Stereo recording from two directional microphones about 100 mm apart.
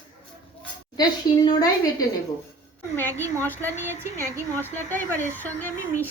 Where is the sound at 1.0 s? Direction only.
45° left (ahead or behind).